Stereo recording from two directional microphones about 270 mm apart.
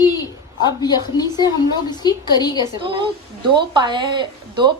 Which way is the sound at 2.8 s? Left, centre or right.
Centre.